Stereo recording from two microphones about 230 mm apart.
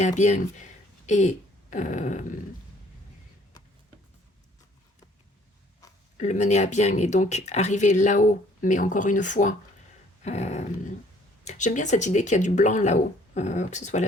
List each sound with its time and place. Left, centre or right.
0.0 s speech: left
6.1 s speech: left
10.2 s a sound: left
11.4 s speech: left